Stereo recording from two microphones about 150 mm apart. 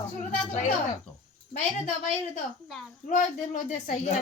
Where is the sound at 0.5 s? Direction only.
50° left (ahead or behind).